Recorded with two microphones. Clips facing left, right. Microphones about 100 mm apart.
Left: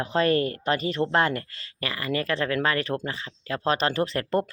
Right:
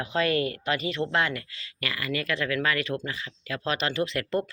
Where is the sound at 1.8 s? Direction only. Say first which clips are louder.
Left 3 dB; 30° left (ahead or behind).